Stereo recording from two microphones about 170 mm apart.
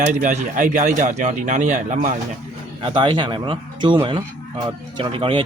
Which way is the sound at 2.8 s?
30° right (ahead or behind).